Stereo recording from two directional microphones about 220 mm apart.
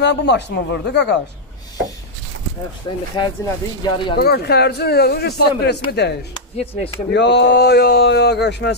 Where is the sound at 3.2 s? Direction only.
20° left (ahead or behind).